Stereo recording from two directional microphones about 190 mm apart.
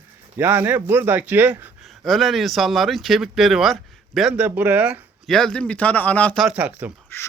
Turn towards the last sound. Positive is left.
turn(degrees=10)  # may be behind; listen again after turning